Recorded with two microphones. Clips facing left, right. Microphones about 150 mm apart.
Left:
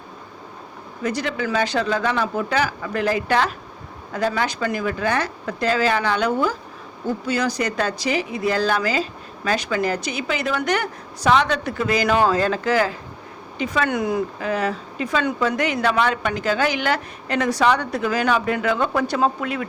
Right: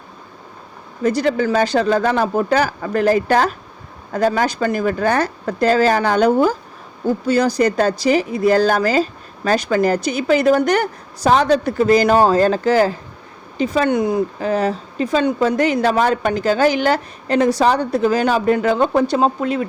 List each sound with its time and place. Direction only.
1.0 s speech: 35° right (ahead or behind)